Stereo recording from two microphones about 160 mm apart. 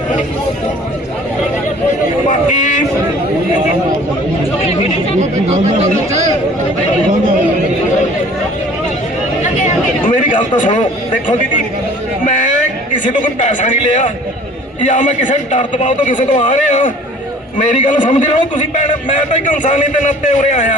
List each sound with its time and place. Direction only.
2.2 s a man's voice: 50° left (ahead or behind)
5.2 s speech: 45° right (ahead or behind)
9.4 s a sound: 50° left (ahead or behind)
10.2 s a man's voice: 55° left (ahead or behind)
12.9 s a man's voice: 55° left (ahead or behind)